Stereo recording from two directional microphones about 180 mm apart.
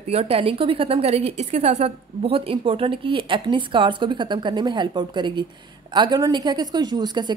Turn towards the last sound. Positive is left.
turn(degrees=-25)  # may be behind; listen again after turning